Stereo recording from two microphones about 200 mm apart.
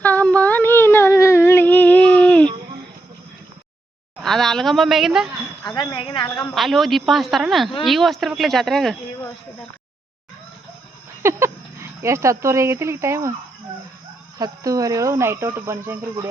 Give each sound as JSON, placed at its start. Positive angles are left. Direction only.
{"t": 0.0, "sound": "a sound", "side_deg": 10}
{"t": 4.2, "sound": "speech", "side_deg": 0}
{"t": 5.6, "sound": "speech", "side_deg": 20}
{"t": 6.3, "sound": "speech", "side_deg": 0}
{"t": 11.2, "sound": "speech", "side_deg": -15}
{"t": 14.3, "sound": "speech", "side_deg": -20}